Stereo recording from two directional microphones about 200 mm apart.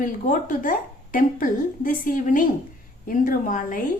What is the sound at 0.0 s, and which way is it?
A woman's voice, 40° left (ahead or behind).